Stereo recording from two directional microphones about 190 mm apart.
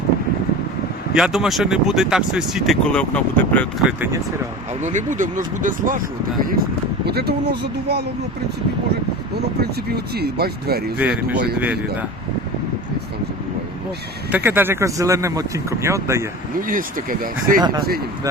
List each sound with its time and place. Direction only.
1.1 s speech: 5° right (ahead or behind)
3.8 s speech: 10° right (ahead or behind)
4.8 s speech: 40° right (ahead or behind)
7.0 s speech: 60° right (ahead or behind)
9.6 s speech: 55° right (ahead or behind)
10.9 s speech: 5° right (ahead or behind)
14.3 s speech: 10° right (ahead or behind)
16.6 s speech: 45° right (ahead or behind)